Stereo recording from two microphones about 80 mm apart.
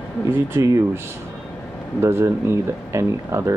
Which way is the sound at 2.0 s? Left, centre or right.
Right.